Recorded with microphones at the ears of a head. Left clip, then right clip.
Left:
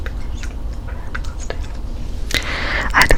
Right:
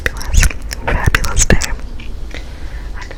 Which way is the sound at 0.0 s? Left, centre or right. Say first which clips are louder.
Right 15 dB; right.